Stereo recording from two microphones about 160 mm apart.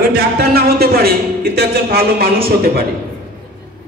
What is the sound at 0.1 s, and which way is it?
Speech, 75° right (ahead or behind).